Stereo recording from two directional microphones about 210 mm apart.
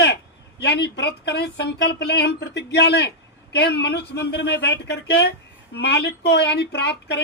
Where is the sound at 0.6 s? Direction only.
50° left (ahead or behind).